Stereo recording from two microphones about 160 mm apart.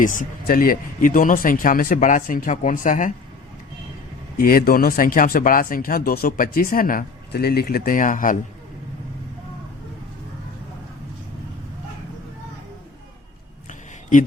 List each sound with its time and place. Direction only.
0.0 s speech: 55° left (ahead or behind)
4.4 s speech: 65° left (ahead or behind)
13.7 s a sound: 55° left (ahead or behind)